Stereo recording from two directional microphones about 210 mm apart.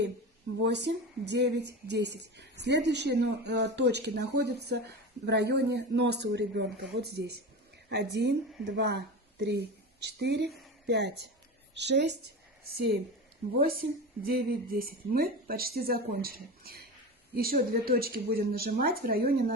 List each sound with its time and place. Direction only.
0.7 s a woman's voice: 55° right (ahead or behind)
13.5 s speech: 45° right (ahead or behind)